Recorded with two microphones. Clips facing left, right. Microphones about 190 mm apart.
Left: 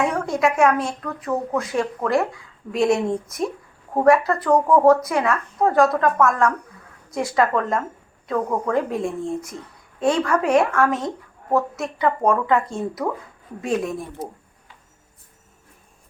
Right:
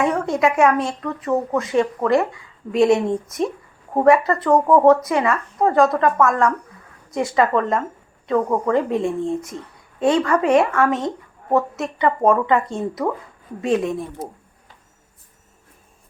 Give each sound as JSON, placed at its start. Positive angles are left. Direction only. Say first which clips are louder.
{"t": 0.0, "sound": "a woman's voice", "louder": "right 2 dB", "side_deg": 0}